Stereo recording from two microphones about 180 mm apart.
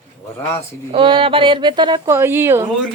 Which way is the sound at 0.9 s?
30° right (ahead or behind).